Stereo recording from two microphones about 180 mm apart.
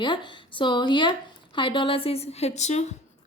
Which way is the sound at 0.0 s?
25° left (ahead or behind).